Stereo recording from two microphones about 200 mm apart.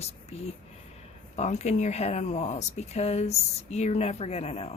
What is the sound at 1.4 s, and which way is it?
Speech, 35° left (ahead or behind).